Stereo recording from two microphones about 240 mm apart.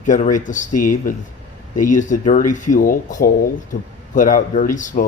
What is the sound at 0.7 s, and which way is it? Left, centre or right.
Speech, left.